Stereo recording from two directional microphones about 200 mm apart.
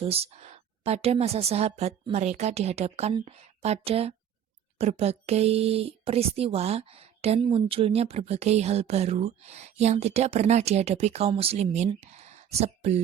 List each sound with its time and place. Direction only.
0.0 s speech: 30° right (ahead or behind)